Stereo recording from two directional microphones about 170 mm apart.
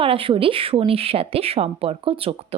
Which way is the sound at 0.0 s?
30° right (ahead or behind).